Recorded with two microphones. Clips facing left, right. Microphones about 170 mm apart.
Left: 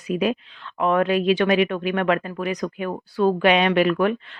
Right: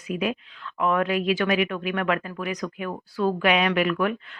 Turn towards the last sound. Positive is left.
turn(degrees=30)  # may be behind; listen again after turning